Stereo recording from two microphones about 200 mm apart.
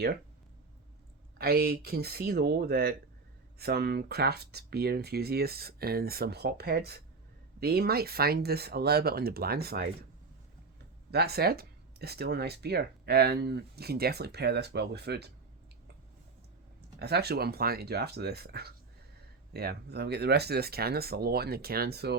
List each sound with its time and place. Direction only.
1.4 s speech: 50° right (ahead or behind)
11.1 s speech: 55° right (ahead or behind)
17.0 s speech: 55° right (ahead or behind)